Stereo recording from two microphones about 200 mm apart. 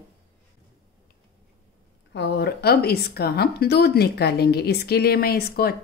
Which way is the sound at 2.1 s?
55° left (ahead or behind).